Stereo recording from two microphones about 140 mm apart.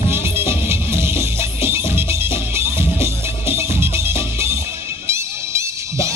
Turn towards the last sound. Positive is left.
turn(degrees=-20)  # may be behind; listen again after turning